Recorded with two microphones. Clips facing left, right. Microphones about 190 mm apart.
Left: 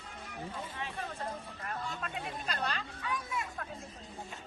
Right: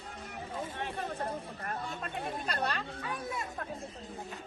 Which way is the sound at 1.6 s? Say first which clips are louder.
Left 1 dB; 45° right (ahead or behind).